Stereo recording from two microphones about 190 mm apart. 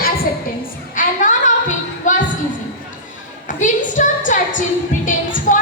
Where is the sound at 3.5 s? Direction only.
40° left (ahead or behind).